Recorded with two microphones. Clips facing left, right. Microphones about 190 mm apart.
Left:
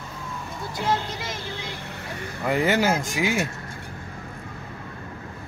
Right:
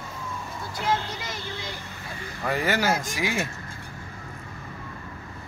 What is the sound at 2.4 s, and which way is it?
Speech, 20° left (ahead or behind).